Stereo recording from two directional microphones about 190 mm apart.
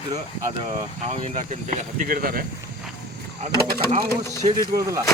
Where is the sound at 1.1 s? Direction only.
35° right (ahead or behind).